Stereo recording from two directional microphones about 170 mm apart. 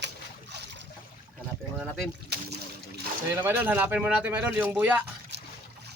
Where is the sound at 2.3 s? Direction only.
75° right (ahead or behind).